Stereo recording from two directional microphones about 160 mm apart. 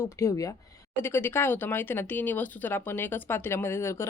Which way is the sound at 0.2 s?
20° left (ahead or behind).